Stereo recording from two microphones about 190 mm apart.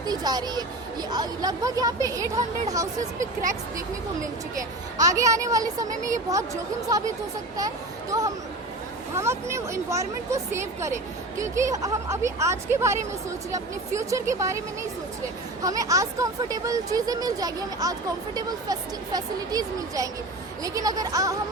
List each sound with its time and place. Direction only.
0.0 s speech: 20° right (ahead or behind)
4.9 s speech: 20° right (ahead or behind)
8.1 s speech: 15° right (ahead or behind)
15.6 s speech: 20° right (ahead or behind)